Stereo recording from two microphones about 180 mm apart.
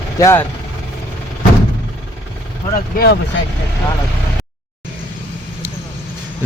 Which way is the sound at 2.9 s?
60° left (ahead or behind).